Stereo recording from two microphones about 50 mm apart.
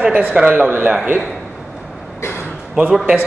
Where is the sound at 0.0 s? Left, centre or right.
Right.